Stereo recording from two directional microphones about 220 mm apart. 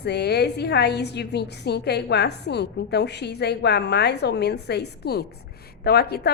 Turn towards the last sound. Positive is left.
turn(degrees=45)  # may be behind; listen again after turning